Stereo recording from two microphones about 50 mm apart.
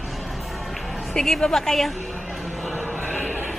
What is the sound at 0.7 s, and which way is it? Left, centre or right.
Speech, centre.